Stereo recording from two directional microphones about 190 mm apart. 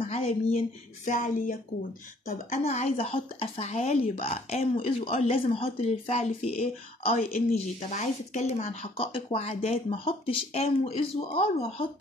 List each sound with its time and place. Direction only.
0.0 s speech: 35° left (ahead or behind)
2.6 s speech: 35° left (ahead or behind)